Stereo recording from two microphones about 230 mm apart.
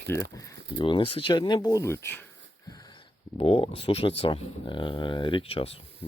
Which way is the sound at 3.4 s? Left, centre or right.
Left.